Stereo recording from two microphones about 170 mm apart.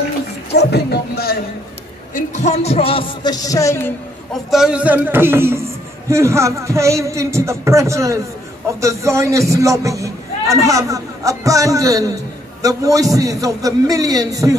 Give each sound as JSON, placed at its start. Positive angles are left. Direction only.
{"t": 0.5, "sound": "music", "side_deg": 75}
{"t": 2.1, "sound": "music", "side_deg": 45}
{"t": 4.3, "sound": "a man's voice", "side_deg": 0}